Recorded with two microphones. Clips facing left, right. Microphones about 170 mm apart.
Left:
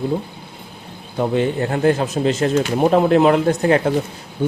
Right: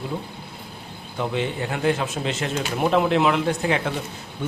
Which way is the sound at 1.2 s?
45° left (ahead or behind).